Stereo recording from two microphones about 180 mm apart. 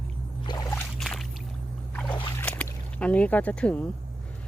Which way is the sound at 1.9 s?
10° left (ahead or behind).